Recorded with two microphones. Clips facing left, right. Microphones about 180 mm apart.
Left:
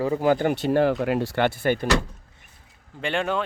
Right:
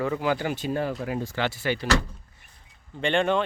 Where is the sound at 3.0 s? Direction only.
5° left (ahead or behind).